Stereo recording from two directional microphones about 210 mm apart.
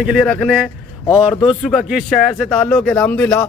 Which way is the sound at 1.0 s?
20° left (ahead or behind).